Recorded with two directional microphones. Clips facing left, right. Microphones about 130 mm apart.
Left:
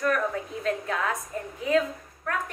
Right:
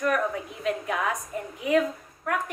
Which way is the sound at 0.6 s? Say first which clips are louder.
Right 1 dB; 15° right (ahead or behind).